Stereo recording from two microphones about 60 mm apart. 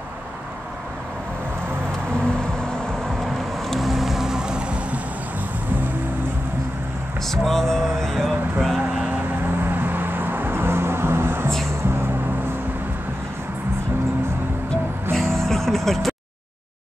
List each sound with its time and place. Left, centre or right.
2.1 s vehicle: centre
7.2 s speech: centre
9.6 s vehicle: right
15.1 s music: centre